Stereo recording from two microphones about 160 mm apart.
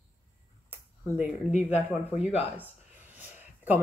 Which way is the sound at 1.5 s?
45° left (ahead or behind).